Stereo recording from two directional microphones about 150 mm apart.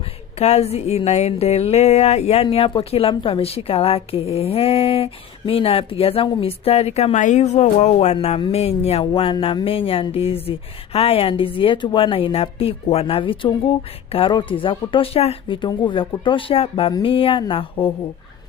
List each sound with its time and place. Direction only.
0.3 s speech: 45° left (ahead or behind)